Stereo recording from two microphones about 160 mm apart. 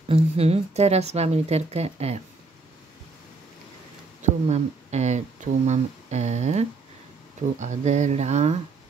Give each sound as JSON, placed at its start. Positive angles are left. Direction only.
{"t": 0.1, "sound": "a woman's voice", "side_deg": -40}
{"t": 4.2, "sound": "speech", "side_deg": -45}